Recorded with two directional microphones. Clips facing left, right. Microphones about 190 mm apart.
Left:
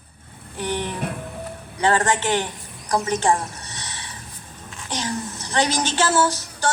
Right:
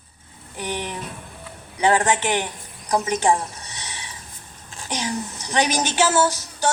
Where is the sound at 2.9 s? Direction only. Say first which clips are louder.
Right 1 dB; 15° right (ahead or behind).